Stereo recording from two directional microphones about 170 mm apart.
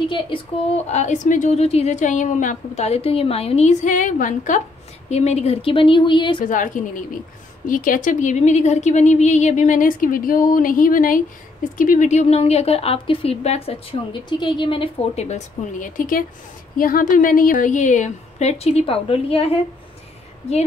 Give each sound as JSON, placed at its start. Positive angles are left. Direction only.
{"t": 0.8, "sound": "a woman's voice", "side_deg": 45}
{"t": 6.4, "sound": "a woman's voice", "side_deg": 50}